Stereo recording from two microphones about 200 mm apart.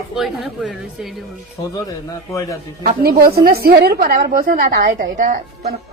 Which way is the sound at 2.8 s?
45° right (ahead or behind).